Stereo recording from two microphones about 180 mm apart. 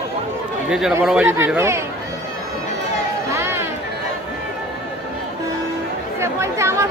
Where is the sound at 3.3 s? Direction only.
15° right (ahead or behind).